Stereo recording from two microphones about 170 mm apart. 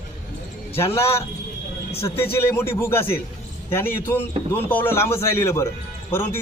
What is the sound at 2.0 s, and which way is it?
Speech, 15° left (ahead or behind).